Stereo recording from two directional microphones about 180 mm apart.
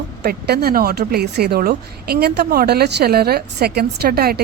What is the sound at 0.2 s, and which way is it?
Speech, 60° right (ahead or behind).